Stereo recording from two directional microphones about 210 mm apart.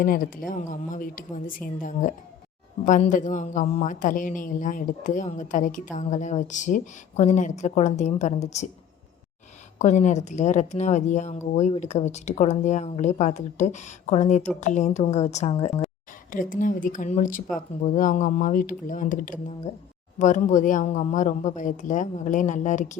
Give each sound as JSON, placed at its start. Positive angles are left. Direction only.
{"t": 0.0, "sound": "speech", "side_deg": 40}
{"t": 9.7, "sound": "speech", "side_deg": 35}
{"t": 16.3, "sound": "speech", "side_deg": 40}